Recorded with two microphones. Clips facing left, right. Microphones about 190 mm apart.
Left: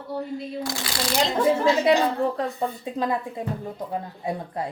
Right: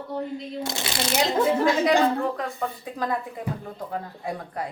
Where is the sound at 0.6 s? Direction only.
25° right (ahead or behind).